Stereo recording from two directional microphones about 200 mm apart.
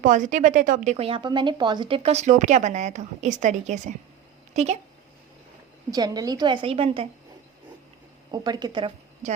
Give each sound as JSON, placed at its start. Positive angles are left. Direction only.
{"t": 0.0, "sound": "a woman's voice", "side_deg": -40}
{"t": 5.9, "sound": "a woman's voice", "side_deg": -20}
{"t": 8.3, "sound": "a woman's voice", "side_deg": -20}